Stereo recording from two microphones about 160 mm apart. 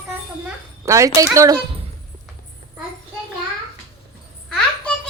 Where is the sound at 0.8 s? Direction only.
20° right (ahead or behind).